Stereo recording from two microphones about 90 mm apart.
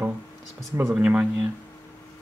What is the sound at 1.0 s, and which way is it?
Speech, 10° right (ahead or behind).